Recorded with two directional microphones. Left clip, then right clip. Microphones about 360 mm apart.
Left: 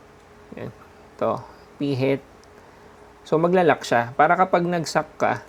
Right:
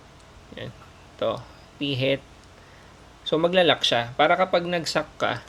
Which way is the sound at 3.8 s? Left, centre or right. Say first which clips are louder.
Left 2 dB; left.